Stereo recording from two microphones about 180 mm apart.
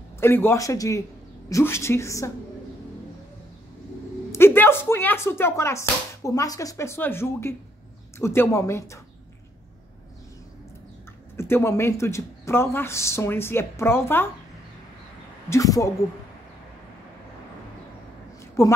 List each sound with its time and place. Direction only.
0.2 s speech: 15° left (ahead or behind)
4.3 s speech: 15° left (ahead or behind)
11.3 s speech: 15° left (ahead or behind)
15.5 s speech: 20° left (ahead or behind)
18.6 s speech: 15° left (ahead or behind)